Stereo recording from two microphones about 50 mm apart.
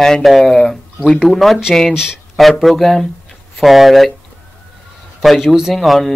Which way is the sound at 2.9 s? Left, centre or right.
Centre.